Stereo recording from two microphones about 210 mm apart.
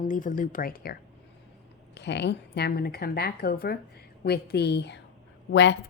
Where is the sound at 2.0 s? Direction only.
55° left (ahead or behind).